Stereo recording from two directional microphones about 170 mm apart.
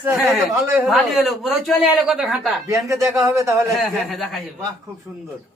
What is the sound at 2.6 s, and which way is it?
A man's voice, 20° right (ahead or behind).